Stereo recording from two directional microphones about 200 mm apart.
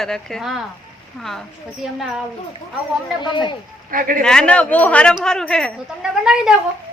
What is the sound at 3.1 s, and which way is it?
Speech, 25° left (ahead or behind).